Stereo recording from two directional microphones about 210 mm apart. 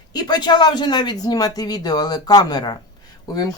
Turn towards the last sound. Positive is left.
turn(degrees=20)  # may be behind; listen again after turning